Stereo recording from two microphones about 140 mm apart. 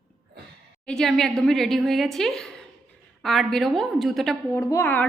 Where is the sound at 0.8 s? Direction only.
5° left (ahead or behind).